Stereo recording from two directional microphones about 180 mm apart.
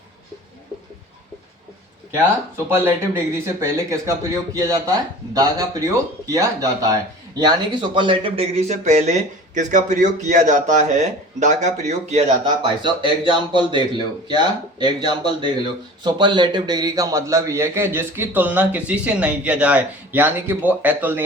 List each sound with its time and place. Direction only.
2.6 s a man's voice: 15° right (ahead or behind); by 12.2 s 40° right (ahead or behind)
12.6 s a man's voice: 25° right (ahead or behind); by 21.2 s 10° right (ahead or behind)